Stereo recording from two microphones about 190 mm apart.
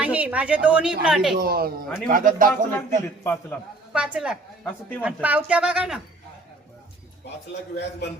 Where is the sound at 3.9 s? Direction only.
5° right (ahead or behind).